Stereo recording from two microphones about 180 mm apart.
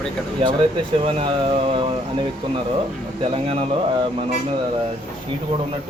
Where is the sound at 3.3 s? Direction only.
30° right (ahead or behind).